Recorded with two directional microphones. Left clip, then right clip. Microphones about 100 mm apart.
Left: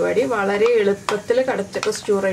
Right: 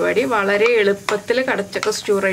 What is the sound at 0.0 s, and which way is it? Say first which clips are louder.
Speech: right 1 dB; 35° right (ahead or behind).